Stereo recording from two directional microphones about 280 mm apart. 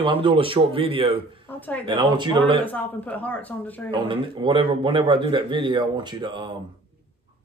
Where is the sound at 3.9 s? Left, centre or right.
Centre.